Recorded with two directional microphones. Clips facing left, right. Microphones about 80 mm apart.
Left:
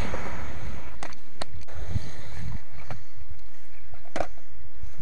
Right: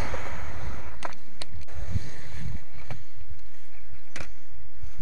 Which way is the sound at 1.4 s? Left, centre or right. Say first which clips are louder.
Left 8 dB; left.